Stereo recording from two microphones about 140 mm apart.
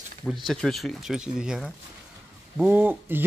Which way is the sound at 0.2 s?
Centre (ahead or behind).